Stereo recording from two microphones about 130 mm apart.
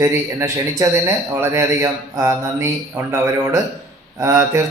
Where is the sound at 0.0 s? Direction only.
25° right (ahead or behind).